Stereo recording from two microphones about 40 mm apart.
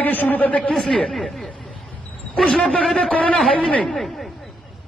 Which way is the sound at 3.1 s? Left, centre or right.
Left.